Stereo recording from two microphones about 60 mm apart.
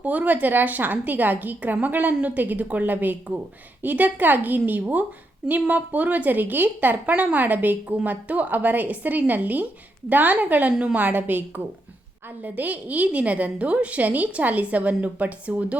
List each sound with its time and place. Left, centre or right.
0.0 s a woman's voice: right
11.0 s a woman's voice: right